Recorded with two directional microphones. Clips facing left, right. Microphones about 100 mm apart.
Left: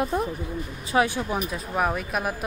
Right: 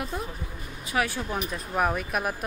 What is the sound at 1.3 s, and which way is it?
A woman's voice, centre (ahead or behind).